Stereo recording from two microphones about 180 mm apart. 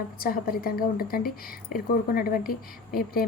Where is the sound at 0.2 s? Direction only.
55° left (ahead or behind).